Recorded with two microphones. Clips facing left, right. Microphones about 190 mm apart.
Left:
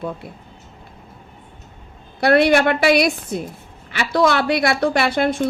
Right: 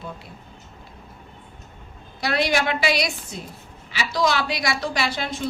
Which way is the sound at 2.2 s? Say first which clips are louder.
Left 9 dB; 60° left (ahead or behind).